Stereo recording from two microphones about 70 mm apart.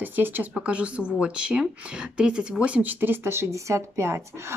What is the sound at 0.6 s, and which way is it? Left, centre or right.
Speech, centre.